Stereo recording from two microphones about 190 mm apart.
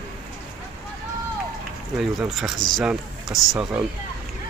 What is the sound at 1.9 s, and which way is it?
Speech, centre (ahead or behind).